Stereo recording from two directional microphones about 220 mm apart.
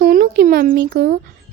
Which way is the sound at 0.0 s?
40° right (ahead or behind).